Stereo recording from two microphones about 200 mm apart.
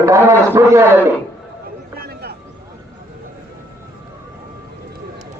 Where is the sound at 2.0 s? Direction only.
50° right (ahead or behind).